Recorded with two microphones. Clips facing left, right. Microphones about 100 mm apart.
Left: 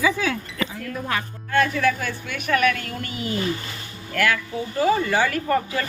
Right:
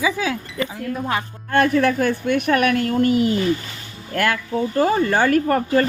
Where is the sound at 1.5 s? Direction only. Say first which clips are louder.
Right 4 dB; 50° right (ahead or behind).